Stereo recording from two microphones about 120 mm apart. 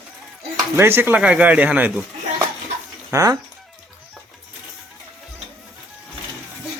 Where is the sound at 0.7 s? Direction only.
20° right (ahead or behind).